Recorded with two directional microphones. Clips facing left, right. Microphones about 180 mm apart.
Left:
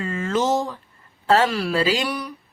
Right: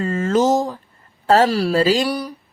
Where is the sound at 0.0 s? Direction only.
40° right (ahead or behind).